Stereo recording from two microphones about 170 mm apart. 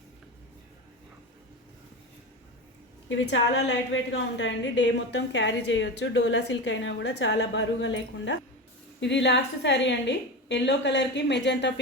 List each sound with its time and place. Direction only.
3.1 s a woman's voice: 90° left